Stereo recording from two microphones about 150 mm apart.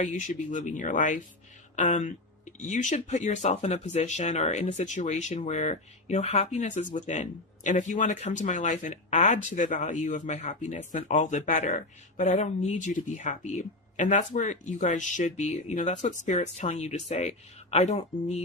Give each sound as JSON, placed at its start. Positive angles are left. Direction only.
{"t": 0.0, "sound": "speech", "side_deg": 55}